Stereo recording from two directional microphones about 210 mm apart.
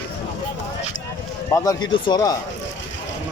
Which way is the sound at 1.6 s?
15° left (ahead or behind).